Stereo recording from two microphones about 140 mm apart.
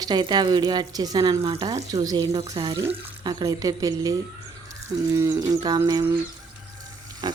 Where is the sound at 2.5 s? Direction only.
40° right (ahead or behind).